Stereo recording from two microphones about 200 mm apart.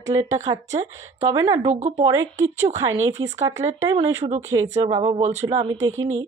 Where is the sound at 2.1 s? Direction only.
20° right (ahead or behind).